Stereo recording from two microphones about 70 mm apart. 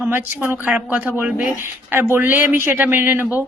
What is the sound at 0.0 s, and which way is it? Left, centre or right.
A man's voice, right.